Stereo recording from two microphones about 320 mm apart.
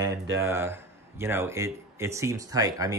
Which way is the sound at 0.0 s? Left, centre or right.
Centre.